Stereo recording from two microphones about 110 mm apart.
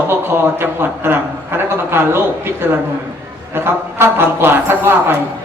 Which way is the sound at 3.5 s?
20° right (ahead or behind).